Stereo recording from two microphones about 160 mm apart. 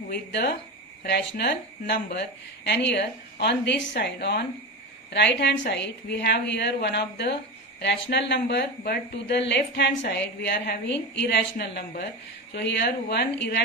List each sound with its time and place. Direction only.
0.1 s a woman's voice: 90° left